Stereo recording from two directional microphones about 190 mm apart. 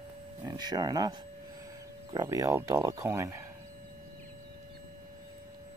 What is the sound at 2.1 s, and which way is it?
Speech, 20° right (ahead or behind).